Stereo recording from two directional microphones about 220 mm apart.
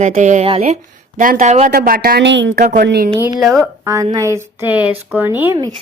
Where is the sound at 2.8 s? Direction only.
45° right (ahead or behind).